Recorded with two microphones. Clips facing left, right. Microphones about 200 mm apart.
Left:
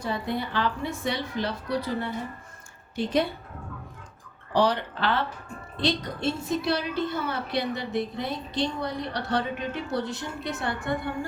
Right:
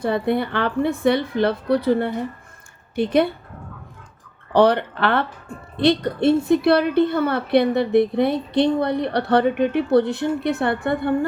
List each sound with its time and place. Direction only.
0.0 s a woman's voice: 60° right (ahead or behind)
4.5 s a woman's voice: 60° right (ahead or behind)